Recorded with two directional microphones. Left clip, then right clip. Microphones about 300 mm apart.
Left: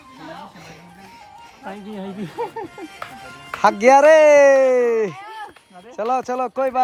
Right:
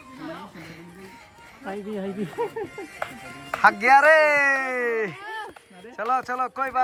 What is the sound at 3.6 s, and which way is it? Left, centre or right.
Speech, centre.